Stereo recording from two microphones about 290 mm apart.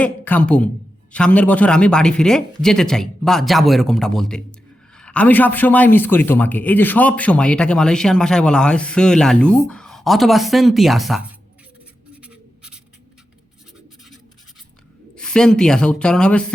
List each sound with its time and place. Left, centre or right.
0.0 s a man's voice: centre
12.1 s writing: centre
15.1 s a woman's voice: centre